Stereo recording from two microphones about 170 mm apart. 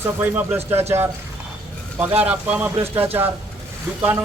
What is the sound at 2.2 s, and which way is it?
A man's voice, 10° right (ahead or behind).